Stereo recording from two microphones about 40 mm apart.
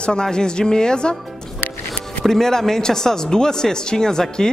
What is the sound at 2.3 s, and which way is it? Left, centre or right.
Speech, centre.